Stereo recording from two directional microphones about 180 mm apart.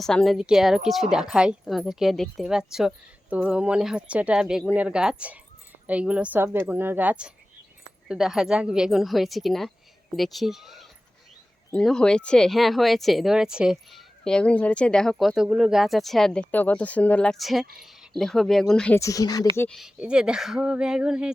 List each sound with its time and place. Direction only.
0.0 s a woman's voice: 5° left (ahead or behind)
18.9 s speech: 20° left (ahead or behind)
19.5 s speech: 5° left (ahead or behind)